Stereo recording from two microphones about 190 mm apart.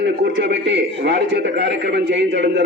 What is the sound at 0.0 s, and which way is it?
A man's voice, 65° right (ahead or behind).